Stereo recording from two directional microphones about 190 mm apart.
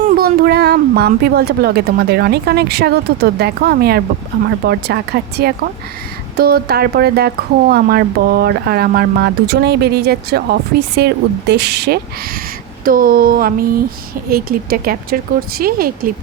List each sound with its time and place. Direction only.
0.2 s speech: 55° right (ahead or behind)
12.8 s speech: 50° right (ahead or behind)